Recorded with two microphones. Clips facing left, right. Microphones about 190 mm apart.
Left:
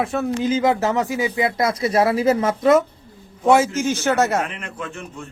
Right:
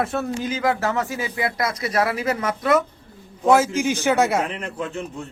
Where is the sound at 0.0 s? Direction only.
Centre (ahead or behind).